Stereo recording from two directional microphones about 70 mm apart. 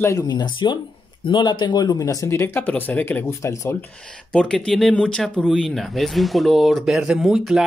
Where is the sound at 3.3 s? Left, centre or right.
Left.